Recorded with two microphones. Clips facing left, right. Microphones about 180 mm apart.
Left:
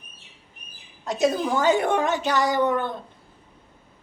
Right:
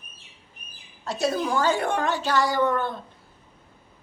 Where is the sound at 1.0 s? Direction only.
20° left (ahead or behind).